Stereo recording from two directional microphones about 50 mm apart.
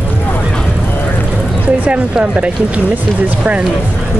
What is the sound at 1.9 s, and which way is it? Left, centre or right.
Speech, right.